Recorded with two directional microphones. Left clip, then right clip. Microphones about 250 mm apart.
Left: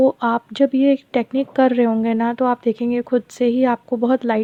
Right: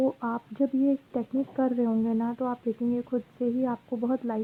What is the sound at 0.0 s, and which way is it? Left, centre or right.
A woman's voice, left.